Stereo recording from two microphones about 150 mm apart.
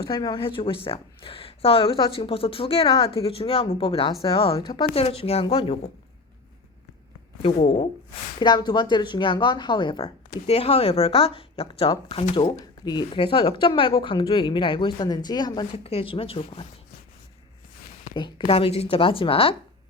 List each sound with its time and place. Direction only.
0.1 s speech: 30° left (ahead or behind)
7.4 s speech: 40° left (ahead or behind)
10.4 s speech: 40° left (ahead or behind)
15.8 s speech: 40° left (ahead or behind)
18.1 s speech: 30° left (ahead or behind)